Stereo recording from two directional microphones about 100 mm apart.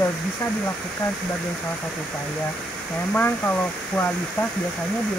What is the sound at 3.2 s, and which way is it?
Speech, 20° left (ahead or behind).